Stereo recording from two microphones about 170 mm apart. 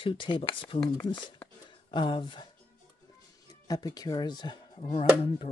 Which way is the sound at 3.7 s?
20° left (ahead or behind).